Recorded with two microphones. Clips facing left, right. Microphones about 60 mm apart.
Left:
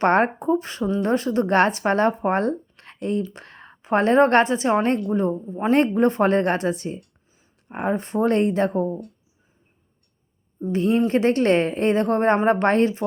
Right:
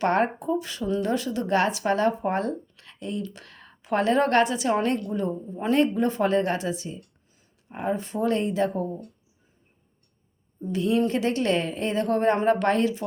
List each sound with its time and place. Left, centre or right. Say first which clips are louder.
0.0 s a woman's voice: left 4 dB; left
5.7 s speech: left 4 dB; left
10.7 s speech: left 4 dB; left